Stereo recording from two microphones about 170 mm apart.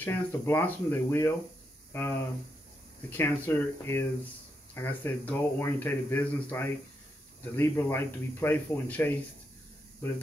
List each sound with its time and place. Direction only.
0.0 s speech: 15° left (ahead or behind)